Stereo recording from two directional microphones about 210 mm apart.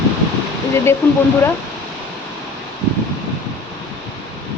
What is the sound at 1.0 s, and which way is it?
Speech, 10° left (ahead or behind).